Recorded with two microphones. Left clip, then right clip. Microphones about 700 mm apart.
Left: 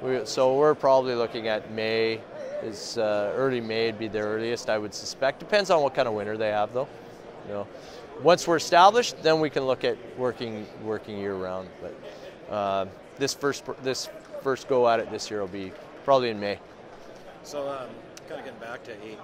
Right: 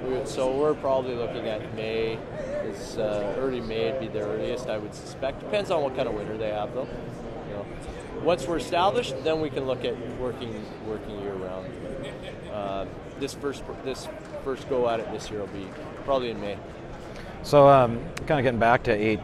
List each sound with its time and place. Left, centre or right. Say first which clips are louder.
0.1 s speech: left 4 dB; left
8.3 s speech: left 5 dB; left
12.5 s speech: left 5 dB; left
17.5 s speech: right 17 dB; right